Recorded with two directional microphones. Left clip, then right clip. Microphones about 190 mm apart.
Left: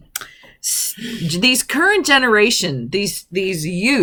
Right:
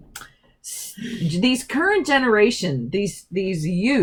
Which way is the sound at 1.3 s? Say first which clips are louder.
Left 6 dB; 20° left (ahead or behind).